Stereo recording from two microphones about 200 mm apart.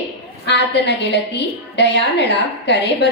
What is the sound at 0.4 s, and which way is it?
A woman's voice, 60° left (ahead or behind).